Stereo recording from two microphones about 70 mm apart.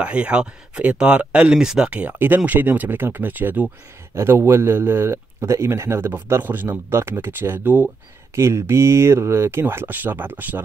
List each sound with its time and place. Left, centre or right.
0.0 s speech: centre
8.4 s speech: right